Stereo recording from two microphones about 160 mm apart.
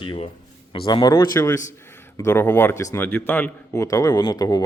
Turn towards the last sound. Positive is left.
turn(degrees=25)  # may be behind; listen again after turning